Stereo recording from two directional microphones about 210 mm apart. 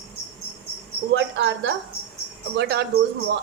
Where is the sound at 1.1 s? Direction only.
60° right (ahead or behind).